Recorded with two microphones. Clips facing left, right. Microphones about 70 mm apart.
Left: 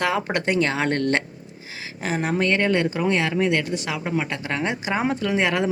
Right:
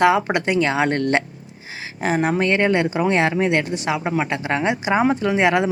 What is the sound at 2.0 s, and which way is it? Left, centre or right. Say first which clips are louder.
Speech: right 4 dB; right.